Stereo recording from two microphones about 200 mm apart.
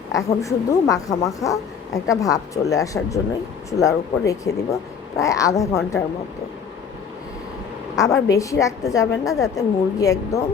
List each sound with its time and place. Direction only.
0.1 s a woman's voice: 15° left (ahead or behind)
7.9 s a woman's voice: 15° left (ahead or behind)